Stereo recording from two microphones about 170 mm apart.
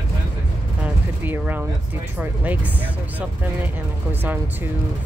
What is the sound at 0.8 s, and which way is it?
Speech, 10° right (ahead or behind).